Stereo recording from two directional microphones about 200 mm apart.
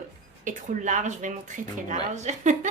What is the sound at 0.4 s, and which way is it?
Speech, 40° right (ahead or behind).